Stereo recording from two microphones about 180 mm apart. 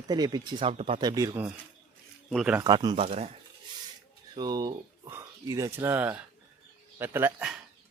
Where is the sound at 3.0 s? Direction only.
35° right (ahead or behind).